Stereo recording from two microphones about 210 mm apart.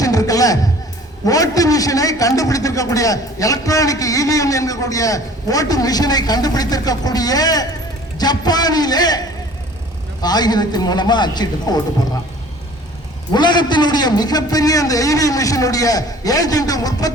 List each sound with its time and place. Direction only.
0.0 s a sound: 15° left (ahead or behind)
1.2 s a man's voice: 15° left (ahead or behind)
13.3 s a man's voice: 20° left (ahead or behind)